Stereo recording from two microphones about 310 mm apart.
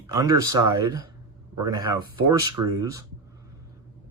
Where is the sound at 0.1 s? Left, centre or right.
Centre.